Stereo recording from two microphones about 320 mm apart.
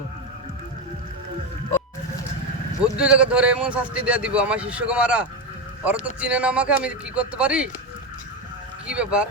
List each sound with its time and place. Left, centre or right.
2.8 s speech: centre
8.9 s speech: centre